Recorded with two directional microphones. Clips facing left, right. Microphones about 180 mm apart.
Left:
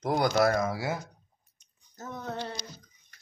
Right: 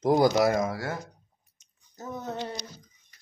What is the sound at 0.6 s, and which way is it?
Speech, 5° left (ahead or behind).